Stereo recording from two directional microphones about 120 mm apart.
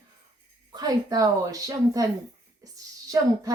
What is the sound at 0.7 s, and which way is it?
A woman's voice, 35° right (ahead or behind).